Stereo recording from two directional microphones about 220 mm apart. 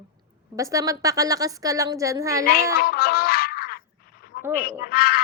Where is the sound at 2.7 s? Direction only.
45° left (ahead or behind).